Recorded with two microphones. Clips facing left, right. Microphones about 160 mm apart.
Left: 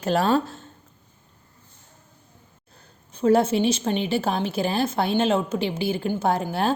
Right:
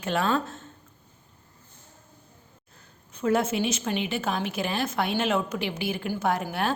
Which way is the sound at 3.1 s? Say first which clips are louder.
Left 6 dB; 30° left (ahead or behind).